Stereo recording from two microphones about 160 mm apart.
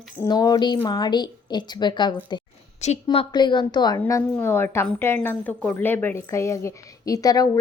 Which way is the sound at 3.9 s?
15° left (ahead or behind).